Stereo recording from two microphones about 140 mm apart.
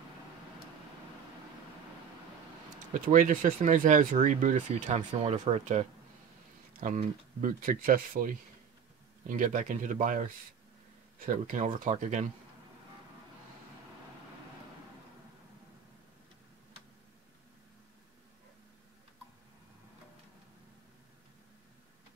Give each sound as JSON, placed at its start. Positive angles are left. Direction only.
{"t": 3.1, "sound": "speech", "side_deg": -70}
{"t": 6.8, "sound": "speech", "side_deg": -75}
{"t": 9.3, "sound": "speech", "side_deg": -70}
{"t": 11.2, "sound": "speech", "side_deg": -70}